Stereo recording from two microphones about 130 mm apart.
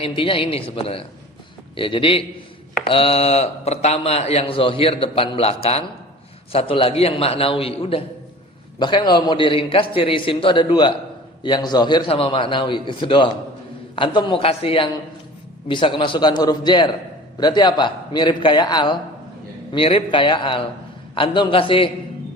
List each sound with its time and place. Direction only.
0.0 s a man's voice: 45° left (ahead or behind)
8.8 s a man's voice: 35° left (ahead or behind)